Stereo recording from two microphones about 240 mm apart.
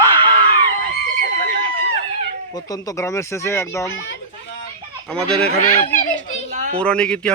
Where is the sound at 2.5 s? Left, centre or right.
Centre.